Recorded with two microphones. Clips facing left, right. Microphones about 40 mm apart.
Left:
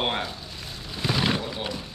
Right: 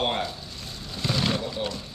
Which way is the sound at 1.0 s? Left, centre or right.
Centre.